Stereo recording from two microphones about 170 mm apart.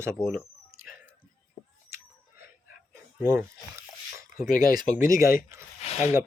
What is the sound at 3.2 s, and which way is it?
Speech, 15° right (ahead or behind).